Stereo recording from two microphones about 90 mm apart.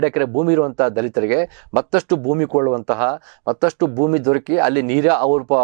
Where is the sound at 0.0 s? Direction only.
15° right (ahead or behind).